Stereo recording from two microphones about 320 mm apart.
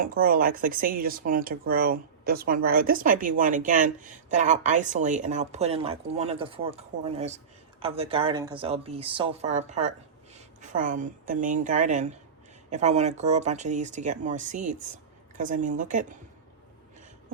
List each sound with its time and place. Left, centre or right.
0.0 s speech: right